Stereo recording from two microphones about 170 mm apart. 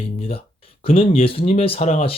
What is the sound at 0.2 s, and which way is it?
Speech, 35° left (ahead or behind).